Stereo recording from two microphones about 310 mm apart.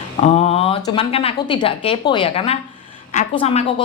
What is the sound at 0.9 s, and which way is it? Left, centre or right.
A woman's voice, centre.